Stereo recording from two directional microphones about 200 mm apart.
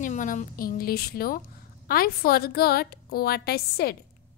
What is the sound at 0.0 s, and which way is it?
A woman's voice, 40° left (ahead or behind).